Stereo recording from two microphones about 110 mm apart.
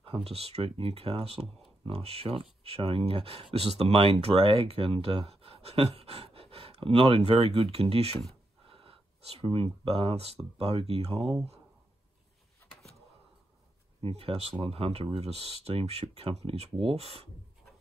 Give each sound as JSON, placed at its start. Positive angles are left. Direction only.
{"t": 0.0, "sound": "speech", "side_deg": -65}
{"t": 14.0, "sound": "speech", "side_deg": -65}